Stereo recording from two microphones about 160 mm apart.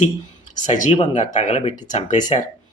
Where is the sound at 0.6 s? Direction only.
50° left (ahead or behind).